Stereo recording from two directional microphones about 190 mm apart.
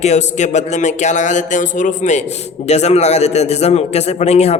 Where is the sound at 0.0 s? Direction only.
35° left (ahead or behind).